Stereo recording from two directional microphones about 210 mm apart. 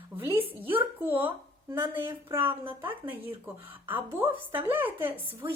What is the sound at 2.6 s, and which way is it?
Speech, 25° right (ahead or behind).